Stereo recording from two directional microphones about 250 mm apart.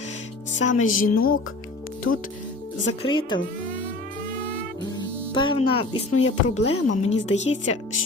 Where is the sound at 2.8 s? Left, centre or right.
Centre.